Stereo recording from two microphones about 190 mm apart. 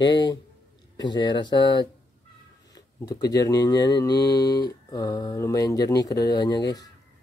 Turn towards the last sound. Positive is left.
turn(degrees=20)  # may be behind; listen again after turning